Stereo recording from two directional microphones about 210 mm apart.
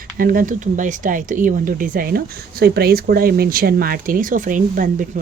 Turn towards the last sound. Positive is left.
turn(degrees=-40)  # may be behind; listen again after turning